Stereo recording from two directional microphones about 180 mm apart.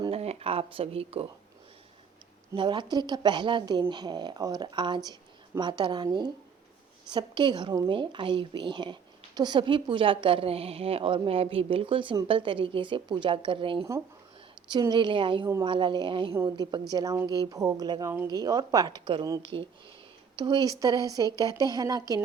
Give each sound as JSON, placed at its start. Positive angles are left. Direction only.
{"t": 0.0, "sound": "speech", "side_deg": -35}
{"t": 2.6, "sound": "speech", "side_deg": -25}